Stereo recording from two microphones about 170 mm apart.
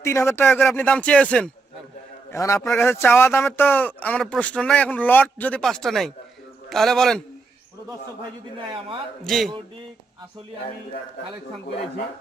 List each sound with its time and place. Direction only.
0.0 s speech: 15° left (ahead or behind)
2.3 s a man's voice: 20° left (ahead or behind); by 7.2 s 5° left (ahead or behind)
9.2 s a man's voice: centre (ahead or behind)